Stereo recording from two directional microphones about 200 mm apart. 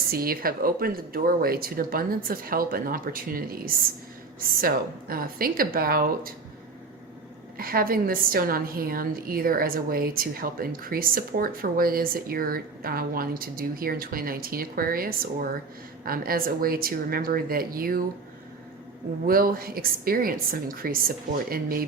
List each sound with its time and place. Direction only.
0.1 s a woman's voice: 45° right (ahead or behind)
7.6 s a woman's voice: 45° right (ahead or behind)
19.2 s a woman's voice: 45° right (ahead or behind)